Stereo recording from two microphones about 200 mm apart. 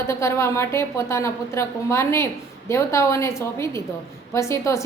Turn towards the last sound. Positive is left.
turn(degrees=15)  # may be behind; listen again after turning